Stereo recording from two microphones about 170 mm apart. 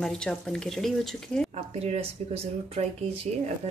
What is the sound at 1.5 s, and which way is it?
Speech, 40° right (ahead or behind).